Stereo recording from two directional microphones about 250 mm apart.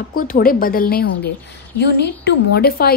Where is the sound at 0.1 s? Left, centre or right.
Left.